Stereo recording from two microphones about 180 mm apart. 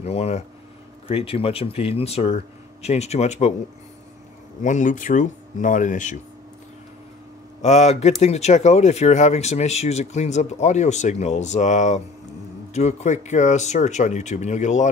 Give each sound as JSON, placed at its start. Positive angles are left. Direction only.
{"t": 0.0, "sound": "speech", "side_deg": 35}
{"t": 4.6, "sound": "speech", "side_deg": 45}
{"t": 7.6, "sound": "speech", "side_deg": 40}